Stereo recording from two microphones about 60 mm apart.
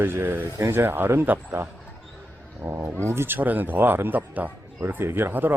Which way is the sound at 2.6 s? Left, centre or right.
Right.